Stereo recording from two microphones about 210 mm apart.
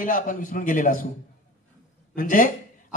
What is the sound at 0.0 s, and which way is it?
Speech, 40° left (ahead or behind).